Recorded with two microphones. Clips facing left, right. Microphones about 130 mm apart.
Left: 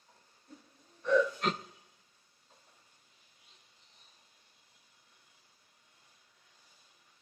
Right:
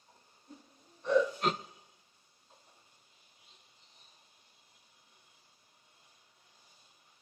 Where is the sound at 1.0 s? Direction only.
10° right (ahead or behind).